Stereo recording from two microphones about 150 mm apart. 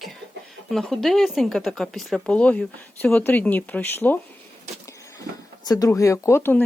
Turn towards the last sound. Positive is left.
turn(degrees=15)  # may be behind; listen again after turning